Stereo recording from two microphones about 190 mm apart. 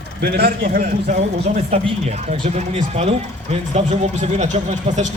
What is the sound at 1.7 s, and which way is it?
Speech, 30° right (ahead or behind).